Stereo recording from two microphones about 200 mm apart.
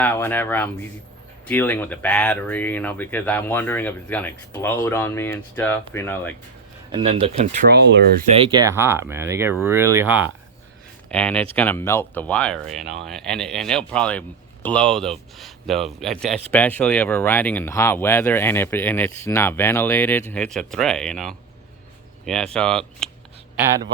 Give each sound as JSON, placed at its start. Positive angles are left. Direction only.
{"t": 0.0, "sound": "speech", "side_deg": 10}
{"t": 6.9, "sound": "speech", "side_deg": -30}
{"t": 7.7, "sound": "speech", "side_deg": -60}
{"t": 8.4, "sound": "speech", "side_deg": -20}
{"t": 11.1, "sound": "speech", "side_deg": 5}